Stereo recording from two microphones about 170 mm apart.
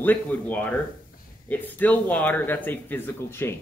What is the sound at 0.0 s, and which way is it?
Speech, 10° left (ahead or behind).